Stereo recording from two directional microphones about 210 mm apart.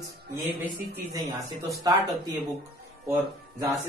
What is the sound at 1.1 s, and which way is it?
A man's voice, 15° right (ahead or behind).